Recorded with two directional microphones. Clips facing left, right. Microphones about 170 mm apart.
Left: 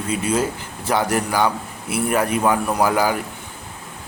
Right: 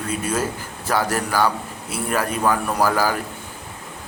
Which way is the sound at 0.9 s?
20° left (ahead or behind).